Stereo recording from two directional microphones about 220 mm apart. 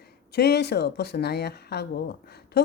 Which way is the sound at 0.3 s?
50° left (ahead or behind).